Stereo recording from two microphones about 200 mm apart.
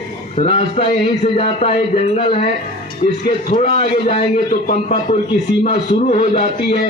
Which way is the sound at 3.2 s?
40° left (ahead or behind).